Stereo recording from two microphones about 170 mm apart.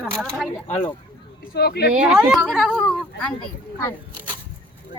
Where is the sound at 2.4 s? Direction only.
Centre (ahead or behind).